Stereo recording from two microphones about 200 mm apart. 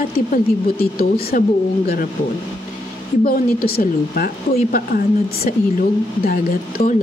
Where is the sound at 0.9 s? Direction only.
50° left (ahead or behind).